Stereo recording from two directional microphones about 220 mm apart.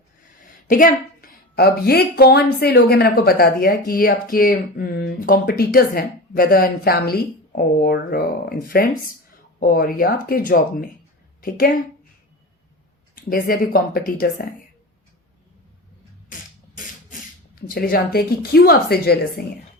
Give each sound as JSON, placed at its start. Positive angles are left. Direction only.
{"t": 0.7, "sound": "a woman's voice", "side_deg": 40}
{"t": 13.3, "sound": "speech", "side_deg": 40}
{"t": 16.7, "sound": "speech", "side_deg": 40}